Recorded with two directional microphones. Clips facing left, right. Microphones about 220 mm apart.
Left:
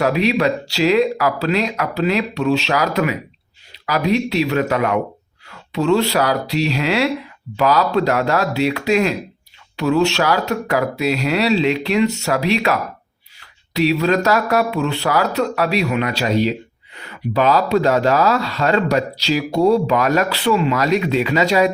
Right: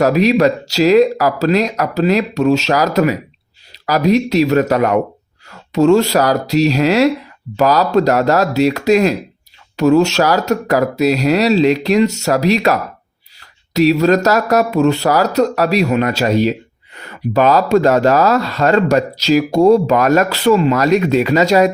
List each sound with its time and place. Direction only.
0.0 s speech: 40° right (ahead or behind)
13.7 s speech: 40° right (ahead or behind)